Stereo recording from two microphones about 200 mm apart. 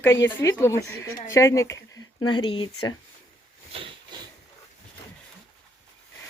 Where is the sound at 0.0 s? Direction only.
10° left (ahead or behind).